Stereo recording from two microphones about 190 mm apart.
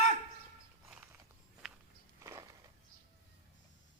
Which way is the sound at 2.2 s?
15° right (ahead or behind).